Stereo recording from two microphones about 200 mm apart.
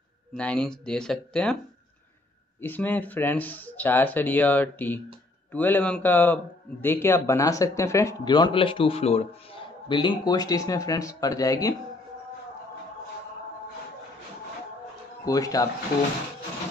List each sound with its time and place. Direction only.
0.3 s speech: 5° left (ahead or behind)
2.6 s a man's voice: 10° left (ahead or behind)
15.2 s a man's voice: 15° left (ahead or behind)